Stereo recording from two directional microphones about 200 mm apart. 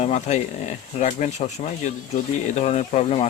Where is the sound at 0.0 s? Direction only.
35° left (ahead or behind).